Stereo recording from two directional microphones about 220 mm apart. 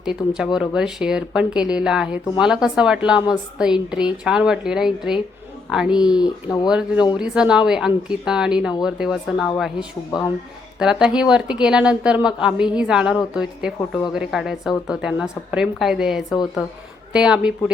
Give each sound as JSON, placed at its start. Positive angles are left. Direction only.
{"t": 0.0, "sound": "speech", "side_deg": -5}
{"t": 10.1, "sound": "speech", "side_deg": 20}
{"t": 10.8, "sound": "speech", "side_deg": -5}